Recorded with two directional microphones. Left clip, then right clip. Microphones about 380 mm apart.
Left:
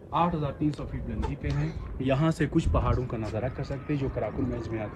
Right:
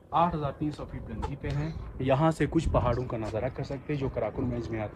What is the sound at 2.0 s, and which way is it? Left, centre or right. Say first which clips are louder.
A man's voice: right 2 dB; centre.